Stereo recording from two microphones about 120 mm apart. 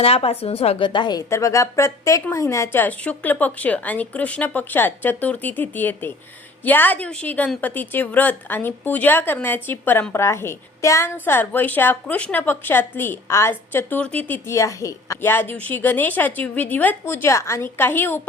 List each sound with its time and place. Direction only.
0.0 s speech: 55° left (ahead or behind)
0.9 s a woman's voice: 40° left (ahead or behind)
1.3 s a woman's voice: 25° left (ahead or behind)